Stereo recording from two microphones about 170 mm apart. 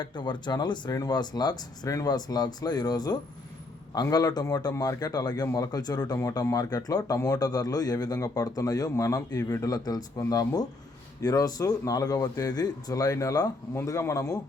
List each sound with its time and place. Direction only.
0.0 s a man's voice: 25° left (ahead or behind)